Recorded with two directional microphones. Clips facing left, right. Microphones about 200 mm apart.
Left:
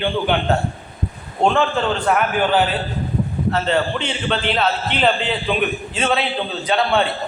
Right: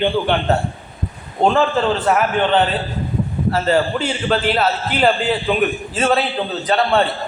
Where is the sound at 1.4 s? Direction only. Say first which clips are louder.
Right 2 dB; centre (ahead or behind).